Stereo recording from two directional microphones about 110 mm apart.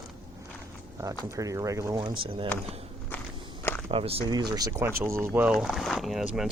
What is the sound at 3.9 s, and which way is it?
Speech, 60° right (ahead or behind).